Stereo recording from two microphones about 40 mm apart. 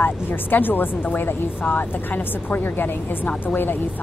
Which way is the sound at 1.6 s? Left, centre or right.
Left.